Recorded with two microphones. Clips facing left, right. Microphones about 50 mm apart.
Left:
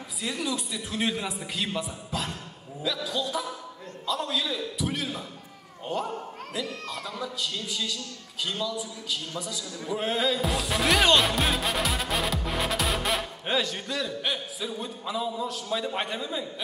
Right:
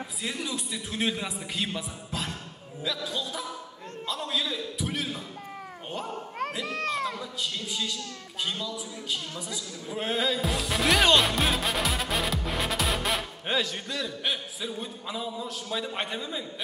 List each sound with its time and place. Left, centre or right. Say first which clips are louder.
0.5 s a man's voice: left 2 dB; centre
6.6 s speech: right 3 dB; right
7.2 s speech: left 1 dB; centre
9.9 s music: left 1 dB; centre